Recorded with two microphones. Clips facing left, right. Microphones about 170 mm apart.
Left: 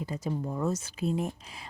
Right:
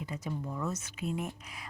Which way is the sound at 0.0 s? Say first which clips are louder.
Left 5 dB; 35° left (ahead or behind).